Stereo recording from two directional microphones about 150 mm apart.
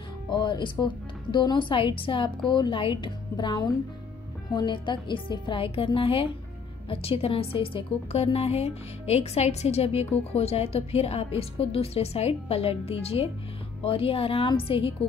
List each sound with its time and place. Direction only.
0.3 s a woman's voice: 30° left (ahead or behind)